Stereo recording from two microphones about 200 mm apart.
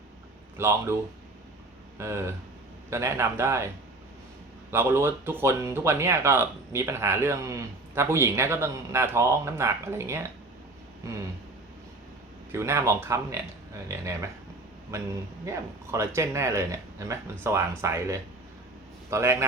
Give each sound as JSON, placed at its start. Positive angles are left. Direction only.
{"t": 0.5, "sound": "speech", "side_deg": -15}
{"t": 2.0, "sound": "speech", "side_deg": -15}
{"t": 4.7, "sound": "speech", "side_deg": -10}
{"t": 12.5, "sound": "speech", "side_deg": -15}